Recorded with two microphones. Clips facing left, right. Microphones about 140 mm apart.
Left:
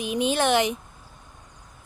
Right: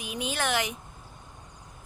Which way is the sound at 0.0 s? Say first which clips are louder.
Left 8 dB; 25° left (ahead or behind).